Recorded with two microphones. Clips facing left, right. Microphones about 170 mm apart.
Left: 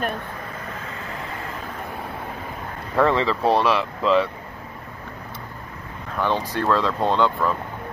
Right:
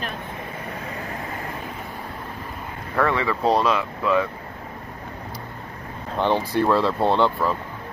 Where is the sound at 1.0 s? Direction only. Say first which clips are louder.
Right 1 dB; 20° right (ahead or behind).